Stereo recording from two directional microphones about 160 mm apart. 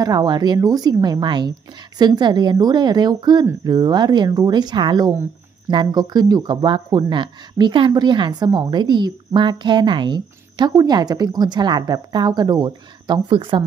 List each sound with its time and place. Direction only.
0.0 s speech: 25° right (ahead or behind)